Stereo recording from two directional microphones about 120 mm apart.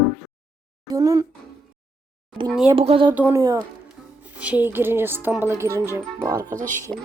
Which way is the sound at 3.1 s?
15° right (ahead or behind).